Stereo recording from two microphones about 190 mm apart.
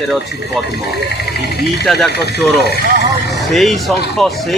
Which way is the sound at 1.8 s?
Centre (ahead or behind).